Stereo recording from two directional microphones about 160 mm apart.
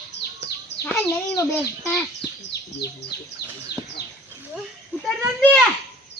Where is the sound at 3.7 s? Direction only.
80° left.